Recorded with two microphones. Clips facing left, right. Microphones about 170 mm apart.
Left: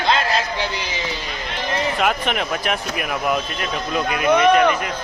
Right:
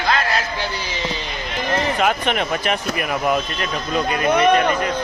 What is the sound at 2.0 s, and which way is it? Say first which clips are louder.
Speech: right 1 dB; centre (ahead or behind).